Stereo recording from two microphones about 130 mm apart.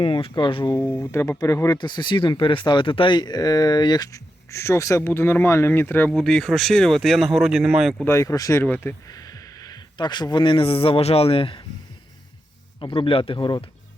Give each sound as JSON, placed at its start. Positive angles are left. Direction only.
{"t": 0.0, "sound": "speech", "side_deg": 45}
{"t": 0.8, "sound": "speech", "side_deg": 15}
{"t": 6.1, "sound": "speech", "side_deg": 5}
{"t": 8.0, "sound": "speech", "side_deg": 20}
{"t": 8.6, "sound": "speech", "side_deg": 15}
{"t": 9.0, "sound": "speech", "side_deg": 30}
{"t": 12.8, "sound": "speech", "side_deg": 40}